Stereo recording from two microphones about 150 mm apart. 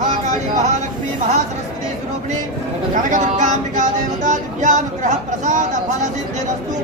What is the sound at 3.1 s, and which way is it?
Music, 55° right (ahead or behind).